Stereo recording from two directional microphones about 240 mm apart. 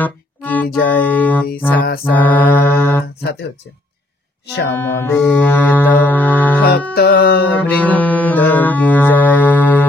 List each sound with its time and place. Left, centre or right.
0.0 s music: centre
2.1 s mantra: centre
4.7 s music: centre
7.0 s music: left
7.5 s music: centre